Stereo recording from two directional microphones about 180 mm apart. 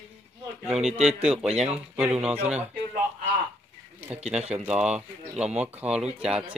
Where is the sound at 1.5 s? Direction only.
35° right (ahead or behind).